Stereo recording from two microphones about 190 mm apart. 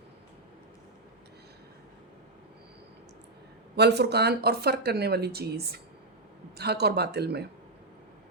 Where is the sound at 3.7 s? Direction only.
60° right (ahead or behind).